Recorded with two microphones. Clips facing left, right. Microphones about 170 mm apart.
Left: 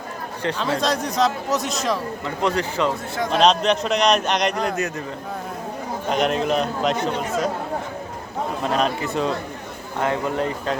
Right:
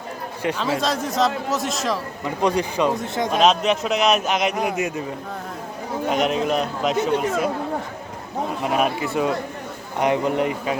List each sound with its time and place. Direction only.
0.6 s a man's voice: centre (ahead or behind)
2.2 s speech: 15° right (ahead or behind)
3.3 s a man's voice: centre (ahead or behind)
6.1 s a man's voice: centre (ahead or behind)
8.6 s speech: 10° right (ahead or behind)